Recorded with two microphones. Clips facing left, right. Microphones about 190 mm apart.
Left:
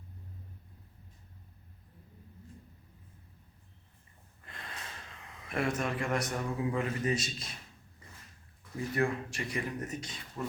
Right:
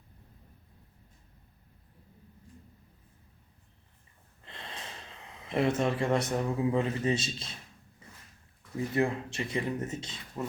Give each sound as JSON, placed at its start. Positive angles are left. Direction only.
{"t": 4.4, "sound": "snort", "side_deg": -25}
{"t": 5.5, "sound": "a man's voice", "side_deg": -25}
{"t": 9.0, "sound": "a man's voice", "side_deg": -25}